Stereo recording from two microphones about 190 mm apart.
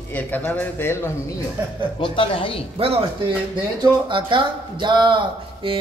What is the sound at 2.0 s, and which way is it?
Speech, 25° left (ahead or behind).